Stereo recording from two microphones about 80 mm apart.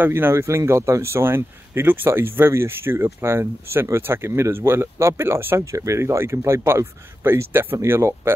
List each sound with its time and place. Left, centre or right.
0.0 s a man's voice: right